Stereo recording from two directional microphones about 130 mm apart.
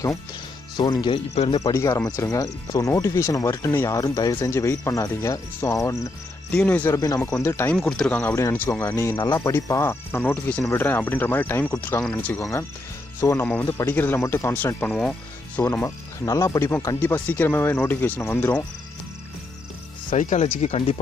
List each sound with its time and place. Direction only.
0.7 s speech: 35° left (ahead or behind)
1.3 s speech: 55° left (ahead or behind)
1.6 s speech: 25° left (ahead or behind)
6.5 s speech: 10° left (ahead or behind)
7.7 s speech: centre (ahead or behind)
8.1 s speech: 10° left (ahead or behind)
8.4 s speech: 25° left (ahead or behind)
9.1 s speech: 35° left (ahead or behind)
9.4 s speech: 20° left (ahead or behind)
12.4 s speech: 25° left (ahead or behind)
20.1 s speech: 70° left (ahead or behind)
20.4 s speech: 50° left (ahead or behind)